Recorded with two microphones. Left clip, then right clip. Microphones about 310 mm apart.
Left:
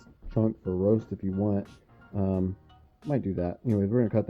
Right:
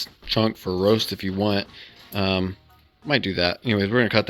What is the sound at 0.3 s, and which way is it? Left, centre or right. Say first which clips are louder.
Speech: right 5 dB; right.